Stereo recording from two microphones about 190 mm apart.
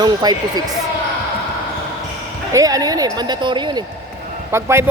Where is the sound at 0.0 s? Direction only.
20° right (ahead or behind).